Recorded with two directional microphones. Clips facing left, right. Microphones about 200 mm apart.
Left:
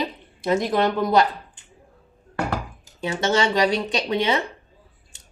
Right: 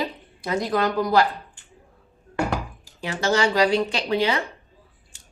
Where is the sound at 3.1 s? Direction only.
25° left (ahead or behind).